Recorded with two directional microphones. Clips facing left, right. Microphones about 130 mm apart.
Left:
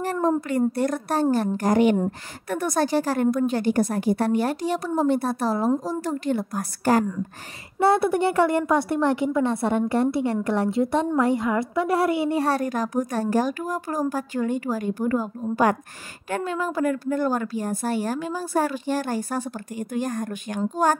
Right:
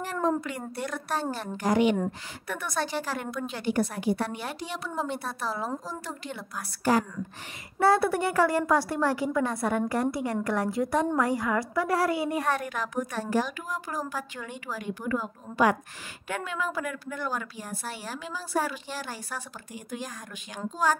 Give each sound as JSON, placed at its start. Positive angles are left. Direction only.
{"t": 0.0, "sound": "a sound", "side_deg": 40}
{"t": 0.5, "sound": "a woman's voice", "side_deg": 45}
{"t": 7.8, "sound": "a woman's voice", "side_deg": 20}